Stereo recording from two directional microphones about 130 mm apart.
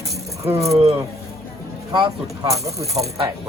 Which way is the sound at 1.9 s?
30° right (ahead or behind).